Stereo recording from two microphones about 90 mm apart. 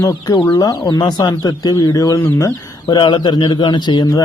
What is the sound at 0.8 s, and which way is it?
Speech, 45° left (ahead or behind).